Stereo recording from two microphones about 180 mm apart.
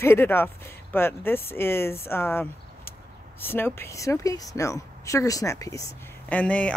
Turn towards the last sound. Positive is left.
turn(degrees=5)  # may be behind; listen again after turning